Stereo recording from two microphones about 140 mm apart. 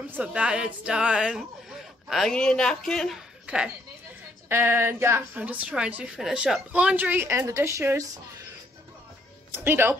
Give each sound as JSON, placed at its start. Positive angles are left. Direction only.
{"t": 0.1, "sound": "a woman's voice", "side_deg": -10}
{"t": 9.5, "sound": "a woman's voice", "side_deg": -15}